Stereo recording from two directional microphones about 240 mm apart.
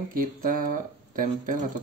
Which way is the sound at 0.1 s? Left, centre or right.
Right.